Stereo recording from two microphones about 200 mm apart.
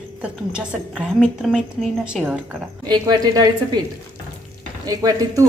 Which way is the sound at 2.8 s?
20° right (ahead or behind).